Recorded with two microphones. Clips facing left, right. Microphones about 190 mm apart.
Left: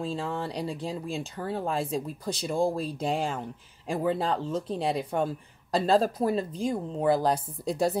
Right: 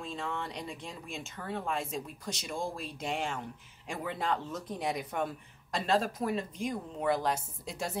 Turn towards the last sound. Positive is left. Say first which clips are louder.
# left 11 dB
turn(degrees=35)  # may be behind; listen again after turning